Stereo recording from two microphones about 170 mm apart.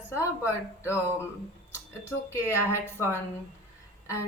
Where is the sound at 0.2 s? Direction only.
15° left (ahead or behind).